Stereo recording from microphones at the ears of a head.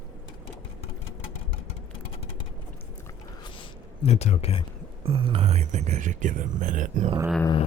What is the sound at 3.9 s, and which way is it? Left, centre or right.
Speech, left.